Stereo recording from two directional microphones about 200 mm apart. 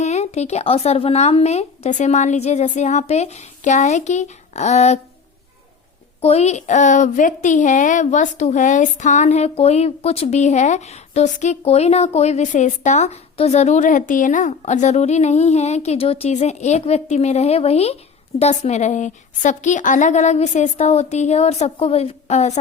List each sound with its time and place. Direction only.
0.0 s a woman's voice: 35° left (ahead or behind)
6.2 s a woman's voice: 30° left (ahead or behind)